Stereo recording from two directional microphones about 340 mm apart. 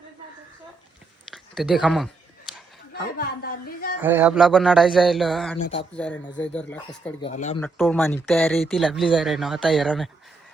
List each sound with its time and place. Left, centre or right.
1.3 s speech: centre
2.5 s a sound: centre
2.9 s a sound: left
4.0 s speech: centre
7.2 s speech: centre
7.6 s speech: centre